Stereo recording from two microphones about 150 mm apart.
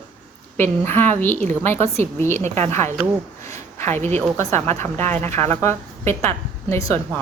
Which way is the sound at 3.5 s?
15° left (ahead or behind).